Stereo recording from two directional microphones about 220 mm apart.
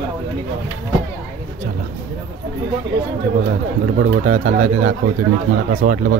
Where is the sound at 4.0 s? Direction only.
40° right (ahead or behind).